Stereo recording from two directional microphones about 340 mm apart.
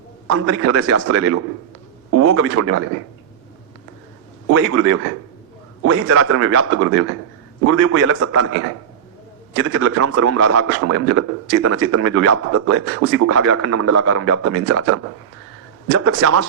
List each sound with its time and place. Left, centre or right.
0.3 s a man's voice: right
4.5 s a man's voice: right